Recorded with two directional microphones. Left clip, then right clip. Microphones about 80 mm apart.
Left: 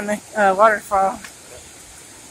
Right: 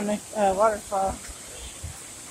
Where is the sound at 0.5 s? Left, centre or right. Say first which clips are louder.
Left 8 dB; left.